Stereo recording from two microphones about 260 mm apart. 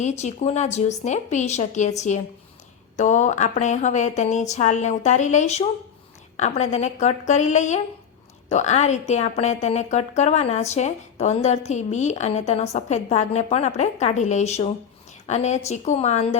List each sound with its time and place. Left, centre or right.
0.0 s a woman's voice: left